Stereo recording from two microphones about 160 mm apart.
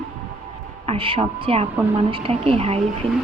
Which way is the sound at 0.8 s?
35° right (ahead or behind).